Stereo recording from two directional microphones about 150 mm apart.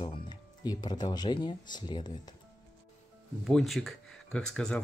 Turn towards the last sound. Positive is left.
turn(degrees=5)  # may be behind; listen again after turning